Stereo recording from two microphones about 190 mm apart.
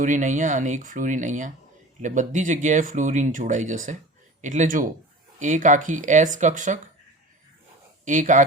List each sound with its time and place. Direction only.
0.0 s speech: 40° right (ahead or behind)
8.0 s speech: 40° right (ahead or behind)